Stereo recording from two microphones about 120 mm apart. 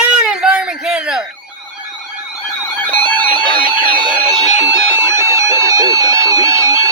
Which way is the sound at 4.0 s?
35° right (ahead or behind).